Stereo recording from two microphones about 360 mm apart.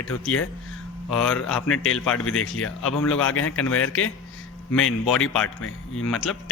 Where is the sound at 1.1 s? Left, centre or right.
Centre.